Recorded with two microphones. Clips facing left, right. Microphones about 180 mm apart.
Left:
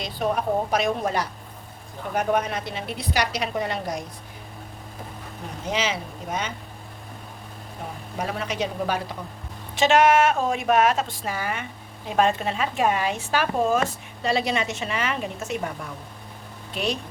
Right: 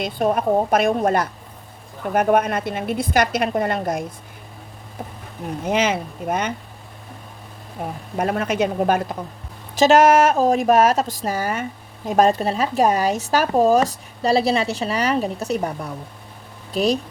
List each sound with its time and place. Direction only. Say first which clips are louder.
0.0 s a woman's voice: right 5 dB; 50° right (ahead or behind)
5.6 s speech: right 6 dB; 55° right (ahead or behind)
8.2 s a woman's voice: right 7 dB; 55° right (ahead or behind)
9.7 s speech: right 5 dB; 40° right (ahead or behind)